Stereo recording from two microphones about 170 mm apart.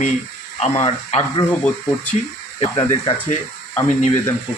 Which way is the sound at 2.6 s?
30° left (ahead or behind).